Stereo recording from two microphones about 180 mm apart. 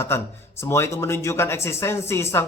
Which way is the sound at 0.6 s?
15° left (ahead or behind).